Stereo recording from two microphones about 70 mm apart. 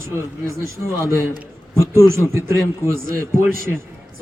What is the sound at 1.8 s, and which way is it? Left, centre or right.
A man's voice, right.